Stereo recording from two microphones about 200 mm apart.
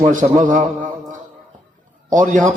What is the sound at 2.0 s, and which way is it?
Speech, 40° right (ahead or behind).